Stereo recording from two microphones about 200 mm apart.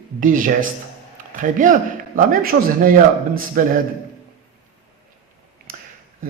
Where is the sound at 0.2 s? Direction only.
40° right (ahead or behind).